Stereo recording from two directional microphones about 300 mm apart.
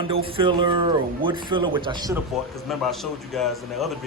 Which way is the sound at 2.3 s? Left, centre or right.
Centre.